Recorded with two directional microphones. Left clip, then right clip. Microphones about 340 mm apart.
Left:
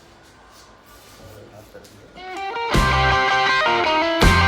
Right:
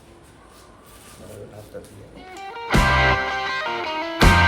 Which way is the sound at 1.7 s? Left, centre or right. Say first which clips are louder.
Right 6 dB; right.